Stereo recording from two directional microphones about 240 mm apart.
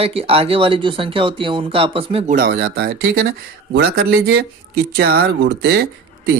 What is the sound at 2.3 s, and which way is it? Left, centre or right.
Speech, right.